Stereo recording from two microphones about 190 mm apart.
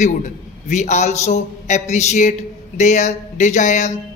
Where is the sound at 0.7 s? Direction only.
40° left (ahead or behind).